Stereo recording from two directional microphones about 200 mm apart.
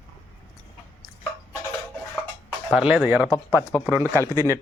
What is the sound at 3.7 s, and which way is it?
Speech, 10° left (ahead or behind).